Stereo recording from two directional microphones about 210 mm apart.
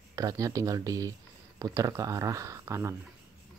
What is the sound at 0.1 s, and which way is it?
Speech, 15° right (ahead or behind).